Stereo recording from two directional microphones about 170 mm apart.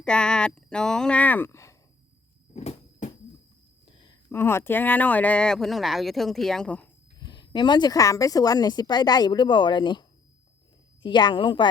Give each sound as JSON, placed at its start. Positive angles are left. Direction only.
{"t": 0.0, "sound": "speech", "side_deg": 5}
{"t": 2.5, "sound": "cupboard open or close", "side_deg": 40}
{"t": 3.9, "sound": "a sound", "side_deg": 25}
{"t": 4.3, "sound": "speech", "side_deg": 15}
{"t": 7.2, "sound": "a woman's voice", "side_deg": 25}